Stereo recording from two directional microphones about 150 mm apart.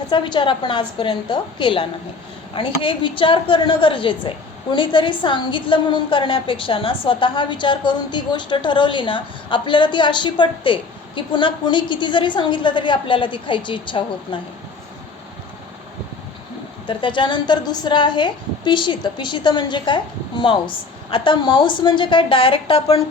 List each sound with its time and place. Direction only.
0.1 s a woman's voice: 30° left (ahead or behind)
17.0 s a woman's voice: 30° left (ahead or behind)